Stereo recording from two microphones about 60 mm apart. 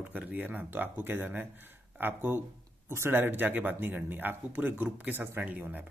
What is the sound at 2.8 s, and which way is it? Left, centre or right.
Speech, right.